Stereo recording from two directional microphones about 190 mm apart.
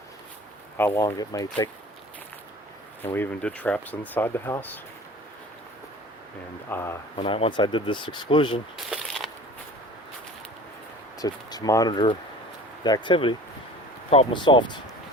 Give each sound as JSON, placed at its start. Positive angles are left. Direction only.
{"t": 0.8, "sound": "speech", "side_deg": 15}
{"t": 3.0, "sound": "speech", "side_deg": 10}
{"t": 6.7, "sound": "speech", "side_deg": 15}
{"t": 7.2, "sound": "speech", "side_deg": 30}
{"t": 8.7, "sound": "a sound", "side_deg": 0}
{"t": 11.2, "sound": "speech", "side_deg": 20}